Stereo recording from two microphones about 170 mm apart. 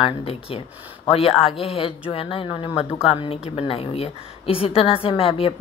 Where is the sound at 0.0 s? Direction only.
35° left (ahead or behind).